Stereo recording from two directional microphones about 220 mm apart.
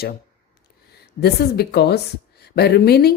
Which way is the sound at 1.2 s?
45° left (ahead or behind).